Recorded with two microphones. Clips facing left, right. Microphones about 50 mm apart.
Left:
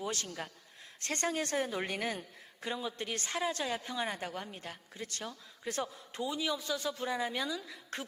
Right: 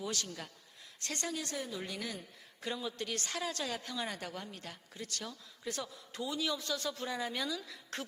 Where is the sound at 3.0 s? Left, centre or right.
Left.